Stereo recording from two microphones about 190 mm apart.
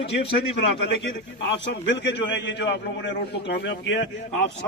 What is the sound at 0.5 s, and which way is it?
A man's voice, 65° left (ahead or behind).